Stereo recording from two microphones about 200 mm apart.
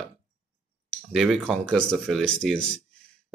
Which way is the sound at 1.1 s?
Centre (ahead or behind).